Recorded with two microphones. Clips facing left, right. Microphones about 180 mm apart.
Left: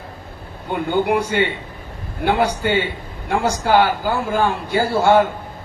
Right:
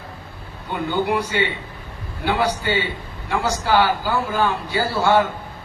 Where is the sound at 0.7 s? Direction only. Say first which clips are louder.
Left 3 dB; 55° left (ahead or behind).